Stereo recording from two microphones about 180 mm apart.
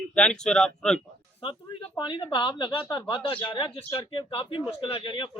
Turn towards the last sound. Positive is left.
turn(degrees=30)  # may be behind; listen again after turning